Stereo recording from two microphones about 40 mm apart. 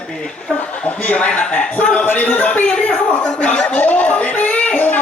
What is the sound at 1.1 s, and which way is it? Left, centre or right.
Speech, left.